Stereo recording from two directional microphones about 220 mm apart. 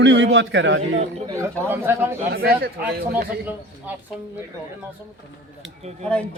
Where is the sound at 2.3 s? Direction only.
45° right (ahead or behind).